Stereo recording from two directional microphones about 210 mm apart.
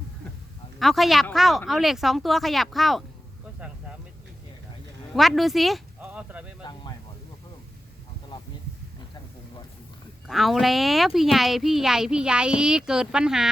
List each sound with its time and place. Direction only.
0.8 s speech: centre (ahead or behind)
5.1 s speech: centre (ahead or behind)
6.6 s a sound: 20° left (ahead or behind)
10.2 s speech: centre (ahead or behind)